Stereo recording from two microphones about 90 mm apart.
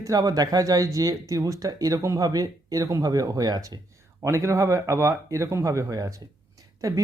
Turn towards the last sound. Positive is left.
turn(degrees=-40)  # may be behind; listen again after turning